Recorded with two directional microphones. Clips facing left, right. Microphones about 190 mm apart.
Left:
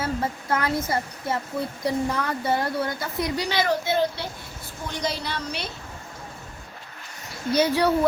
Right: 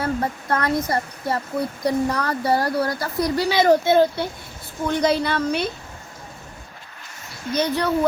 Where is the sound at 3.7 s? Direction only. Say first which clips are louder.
Right 10 dB; 50° right (ahead or behind).